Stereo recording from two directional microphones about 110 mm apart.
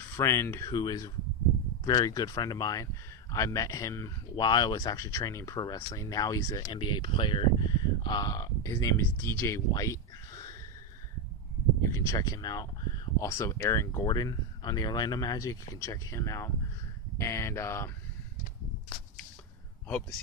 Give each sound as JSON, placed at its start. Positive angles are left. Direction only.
{"t": 0.1, "sound": "speech", "side_deg": 25}
{"t": 0.7, "sound": "speech", "side_deg": 35}
{"t": 4.4, "sound": "speech", "side_deg": 40}
{"t": 6.7, "sound": "speech", "side_deg": 45}
{"t": 11.8, "sound": "speech", "side_deg": 25}
{"t": 14.0, "sound": "speech", "side_deg": 35}